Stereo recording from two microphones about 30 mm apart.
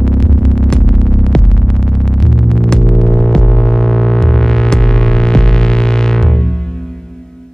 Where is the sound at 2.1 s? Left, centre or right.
Centre.